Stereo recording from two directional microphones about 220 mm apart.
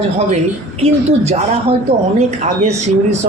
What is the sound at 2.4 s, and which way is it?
Speech, 30° right (ahead or behind).